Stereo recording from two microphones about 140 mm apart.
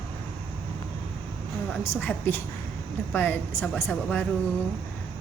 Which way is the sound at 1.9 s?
10° left (ahead or behind).